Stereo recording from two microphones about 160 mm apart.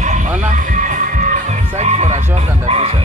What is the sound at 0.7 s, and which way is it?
Music, 55° right (ahead or behind).